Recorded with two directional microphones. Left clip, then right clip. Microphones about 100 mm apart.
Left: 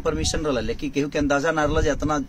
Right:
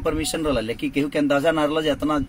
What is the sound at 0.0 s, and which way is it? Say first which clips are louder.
Speech: right 1 dB; 25° left (ahead or behind).